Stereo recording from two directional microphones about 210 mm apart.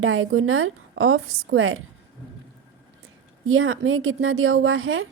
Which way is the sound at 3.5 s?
70° right (ahead or behind).